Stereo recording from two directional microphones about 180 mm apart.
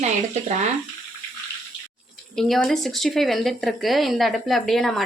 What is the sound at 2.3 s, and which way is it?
Speech, centre (ahead or behind).